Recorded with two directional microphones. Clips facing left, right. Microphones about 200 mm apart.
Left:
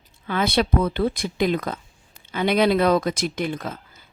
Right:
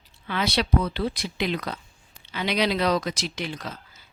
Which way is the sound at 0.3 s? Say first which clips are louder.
Left 4 dB; 50° left (ahead or behind).